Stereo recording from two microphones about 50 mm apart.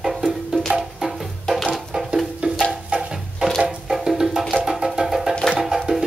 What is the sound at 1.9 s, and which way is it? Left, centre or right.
Music, centre.